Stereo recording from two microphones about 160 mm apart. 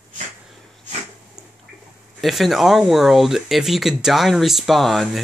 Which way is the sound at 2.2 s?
Centre (ahead or behind).